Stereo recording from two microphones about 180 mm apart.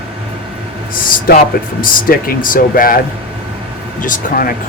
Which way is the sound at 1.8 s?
50° left (ahead or behind).